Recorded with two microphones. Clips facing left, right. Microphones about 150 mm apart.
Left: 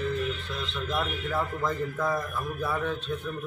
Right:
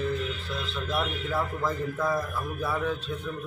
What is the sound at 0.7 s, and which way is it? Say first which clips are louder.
A man's voice: even; 5° right (ahead or behind).